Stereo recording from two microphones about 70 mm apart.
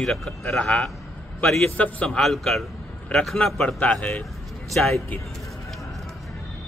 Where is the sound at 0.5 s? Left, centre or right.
Centre.